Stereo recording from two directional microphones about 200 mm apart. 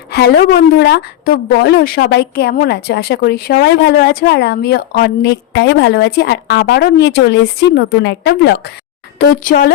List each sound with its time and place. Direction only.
0.1 s a woman's voice: 55° left (ahead or behind)
9.1 s a woman's voice: 45° left (ahead or behind)